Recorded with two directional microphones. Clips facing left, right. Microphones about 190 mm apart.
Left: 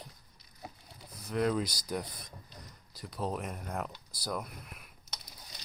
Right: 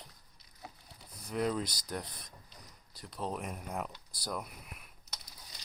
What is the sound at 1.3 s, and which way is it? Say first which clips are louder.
Speech: left 3 dB; centre (ahead or behind).